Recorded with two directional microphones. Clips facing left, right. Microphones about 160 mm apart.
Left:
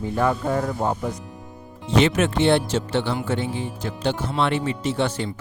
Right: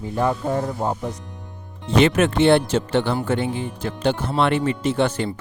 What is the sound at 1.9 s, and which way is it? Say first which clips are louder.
Speech: right 2 dB; 55° right (ahead or behind).